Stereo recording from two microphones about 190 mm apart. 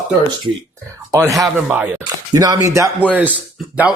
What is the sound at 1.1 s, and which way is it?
Speech, 15° right (ahead or behind).